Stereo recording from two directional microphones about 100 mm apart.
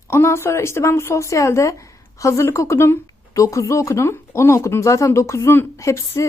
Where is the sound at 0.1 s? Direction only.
25° left (ahead or behind).